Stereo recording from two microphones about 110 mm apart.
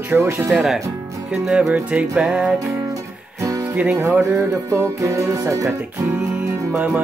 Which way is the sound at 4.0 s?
25° right (ahead or behind).